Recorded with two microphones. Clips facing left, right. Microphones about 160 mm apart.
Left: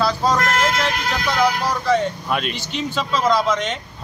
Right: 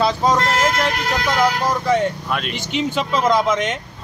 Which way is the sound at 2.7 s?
15° right (ahead or behind).